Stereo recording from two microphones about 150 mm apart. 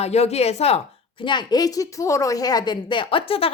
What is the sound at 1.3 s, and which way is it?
A woman's voice, 30° left (ahead or behind).